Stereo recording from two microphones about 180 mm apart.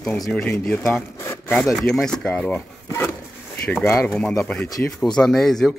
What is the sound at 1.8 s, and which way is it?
Speech, 5° left (ahead or behind).